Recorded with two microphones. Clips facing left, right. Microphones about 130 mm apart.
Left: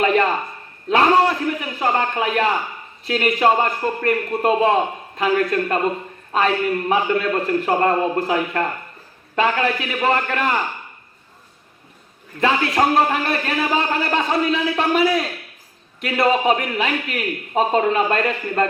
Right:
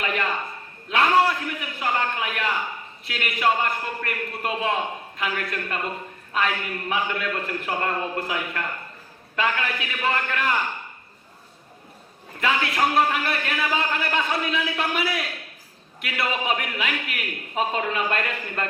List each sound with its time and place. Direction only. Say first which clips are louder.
0.0 s a sound: left 9 dB; 35° left (ahead or behind)
3.1 s a man's voice: left 7 dB; 35° left (ahead or behind)
12.4 s a man's voice: left 5 dB; 30° left (ahead or behind)